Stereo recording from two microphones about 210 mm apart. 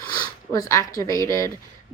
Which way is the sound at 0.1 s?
20° left (ahead or behind).